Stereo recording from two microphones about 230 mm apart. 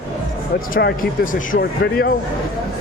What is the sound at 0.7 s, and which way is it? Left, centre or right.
Speech, left.